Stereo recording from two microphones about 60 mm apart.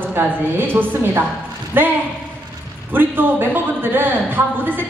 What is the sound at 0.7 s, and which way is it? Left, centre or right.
A man's voice, right.